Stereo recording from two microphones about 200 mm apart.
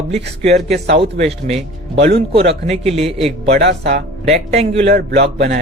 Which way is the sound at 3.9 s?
35° right (ahead or behind).